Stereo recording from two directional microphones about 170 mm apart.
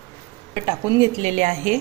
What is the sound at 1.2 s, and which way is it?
Speech, 45° right (ahead or behind).